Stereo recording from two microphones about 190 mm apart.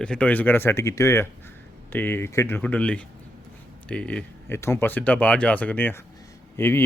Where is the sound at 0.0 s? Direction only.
5° left (ahead or behind).